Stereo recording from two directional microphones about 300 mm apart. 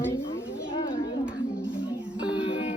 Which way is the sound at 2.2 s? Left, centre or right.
Centre.